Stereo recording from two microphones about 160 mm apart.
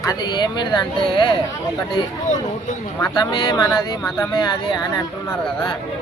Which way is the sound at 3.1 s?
25° left (ahead or behind).